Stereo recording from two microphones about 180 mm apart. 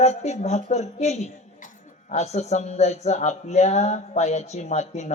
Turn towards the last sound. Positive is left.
turn(degrees=40)  # may be behind; listen again after turning